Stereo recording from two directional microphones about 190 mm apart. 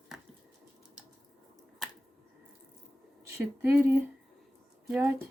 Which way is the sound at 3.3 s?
15° right (ahead or behind).